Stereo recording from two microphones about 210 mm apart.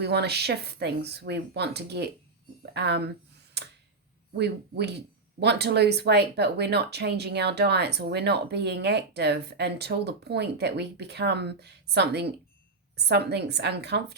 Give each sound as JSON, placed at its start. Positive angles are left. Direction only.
{"t": 0.0, "sound": "speech", "side_deg": -50}
{"t": 4.4, "sound": "speech", "side_deg": -55}